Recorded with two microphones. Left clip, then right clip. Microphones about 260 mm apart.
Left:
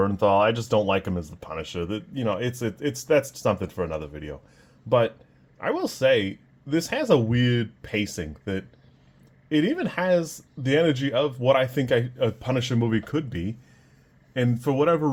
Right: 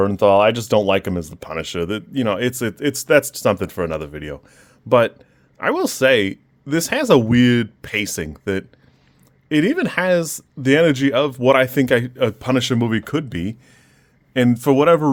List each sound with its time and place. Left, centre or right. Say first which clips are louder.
0.0 s speech: right 7 dB; right